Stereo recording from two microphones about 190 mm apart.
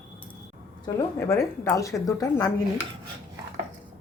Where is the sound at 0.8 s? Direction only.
15° left (ahead or behind).